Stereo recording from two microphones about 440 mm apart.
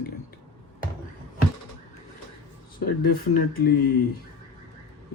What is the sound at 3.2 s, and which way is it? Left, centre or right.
Speech, left.